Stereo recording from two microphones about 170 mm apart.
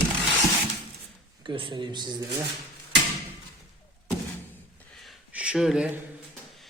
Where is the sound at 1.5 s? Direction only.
30° right (ahead or behind).